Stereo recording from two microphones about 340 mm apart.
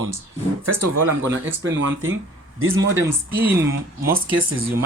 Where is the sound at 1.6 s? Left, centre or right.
Right.